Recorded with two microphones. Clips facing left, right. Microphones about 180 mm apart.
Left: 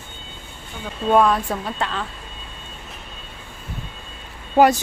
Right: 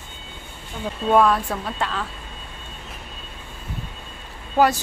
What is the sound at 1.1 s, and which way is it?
A woman's voice, centre (ahead or behind).